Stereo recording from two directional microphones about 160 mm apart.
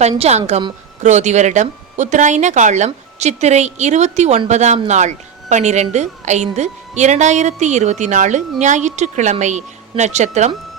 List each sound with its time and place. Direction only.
0.0 s speech: 45° right (ahead or behind)